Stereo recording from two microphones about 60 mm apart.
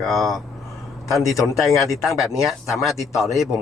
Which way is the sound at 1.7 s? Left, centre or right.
Left.